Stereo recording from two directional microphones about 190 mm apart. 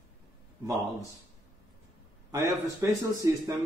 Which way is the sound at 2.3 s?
15° right (ahead or behind).